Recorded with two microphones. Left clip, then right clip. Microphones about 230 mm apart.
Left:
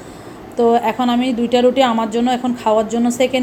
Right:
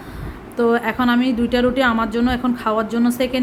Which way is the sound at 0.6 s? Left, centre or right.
Centre.